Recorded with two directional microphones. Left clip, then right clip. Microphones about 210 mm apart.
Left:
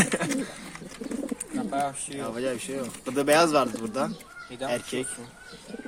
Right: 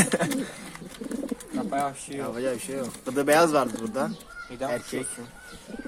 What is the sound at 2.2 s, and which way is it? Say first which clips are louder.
Speech: right 1 dB; centre (ahead or behind).